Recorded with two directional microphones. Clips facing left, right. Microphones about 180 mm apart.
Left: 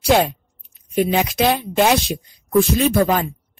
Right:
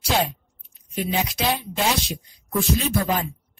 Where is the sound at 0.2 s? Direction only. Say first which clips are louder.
Left 5 dB; 60° left (ahead or behind).